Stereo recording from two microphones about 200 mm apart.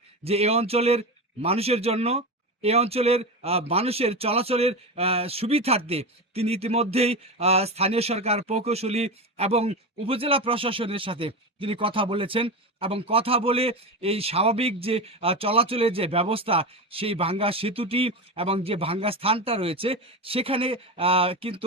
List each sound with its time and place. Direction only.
0.3 s speech: 30° right (ahead or behind)